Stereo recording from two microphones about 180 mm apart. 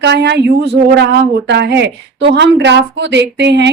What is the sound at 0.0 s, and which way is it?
Speech, 70° right (ahead or behind).